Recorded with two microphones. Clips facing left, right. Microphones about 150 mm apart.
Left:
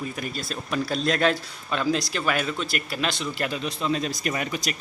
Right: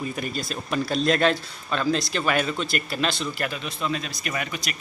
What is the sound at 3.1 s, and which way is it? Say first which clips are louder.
Speech: even; 15° left (ahead or behind).